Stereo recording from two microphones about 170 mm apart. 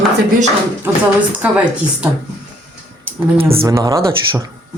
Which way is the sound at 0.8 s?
10° right (ahead or behind).